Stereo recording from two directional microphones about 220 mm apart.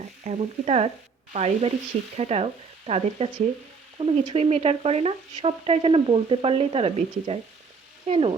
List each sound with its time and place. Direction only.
0.3 s frying: 30° right (ahead or behind)
8.0 s speech: 30° right (ahead or behind)